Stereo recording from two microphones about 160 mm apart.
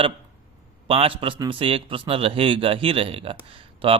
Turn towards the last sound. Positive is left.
turn(degrees=-35)  # may be behind; listen again after turning